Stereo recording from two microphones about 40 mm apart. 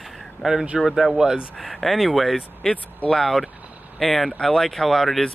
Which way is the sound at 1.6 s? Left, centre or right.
Centre.